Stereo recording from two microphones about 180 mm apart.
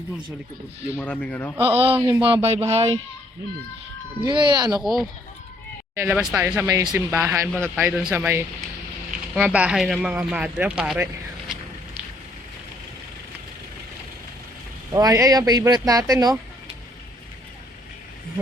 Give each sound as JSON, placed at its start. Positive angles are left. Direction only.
{"t": 1.0, "sound": "a man's voice", "side_deg": 5}
{"t": 1.5, "sound": "speech", "side_deg": -30}
{"t": 2.0, "sound": "speech", "side_deg": -15}
{"t": 2.2, "sound": "speech", "side_deg": -30}
{"t": 4.3, "sound": "speech", "side_deg": -25}
{"t": 4.8, "sound": "speech", "side_deg": 0}
{"t": 14.9, "sound": "speech", "side_deg": -20}